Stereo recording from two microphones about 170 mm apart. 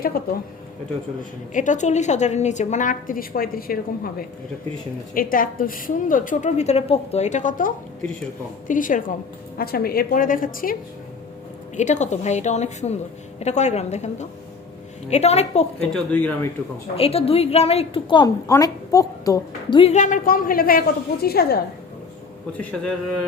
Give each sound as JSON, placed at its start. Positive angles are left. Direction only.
{"t": 0.0, "sound": "a woman's voice", "side_deg": 60}
{"t": 1.5, "sound": "a woman's voice", "side_deg": 45}
{"t": 11.8, "sound": "a woman's voice", "side_deg": 45}
{"t": 15.9, "sound": "speech", "side_deg": 10}
{"t": 17.0, "sound": "a woman's voice", "side_deg": 35}
{"t": 19.8, "sound": "a woman's voice", "side_deg": 45}
{"t": 22.5, "sound": "a man's voice", "side_deg": 5}